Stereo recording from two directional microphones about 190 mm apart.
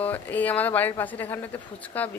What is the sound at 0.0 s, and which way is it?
Speech, 10° left (ahead or behind).